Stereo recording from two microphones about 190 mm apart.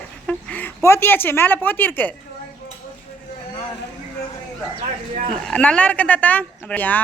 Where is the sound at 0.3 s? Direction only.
5° left (ahead or behind).